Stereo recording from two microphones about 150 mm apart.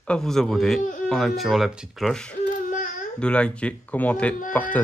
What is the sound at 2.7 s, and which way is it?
Baby cry, 60° left (ahead or behind).